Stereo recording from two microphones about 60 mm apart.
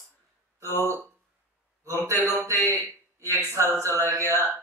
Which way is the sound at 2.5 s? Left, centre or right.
Right.